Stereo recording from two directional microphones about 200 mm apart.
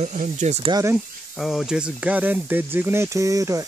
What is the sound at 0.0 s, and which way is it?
Speech, 35° right (ahead or behind).